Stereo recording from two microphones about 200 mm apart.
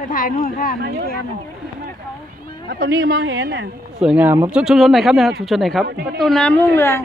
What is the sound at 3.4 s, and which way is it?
Speech, 60° right (ahead or behind).